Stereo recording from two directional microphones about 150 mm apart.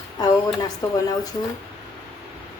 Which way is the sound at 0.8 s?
30° left (ahead or behind).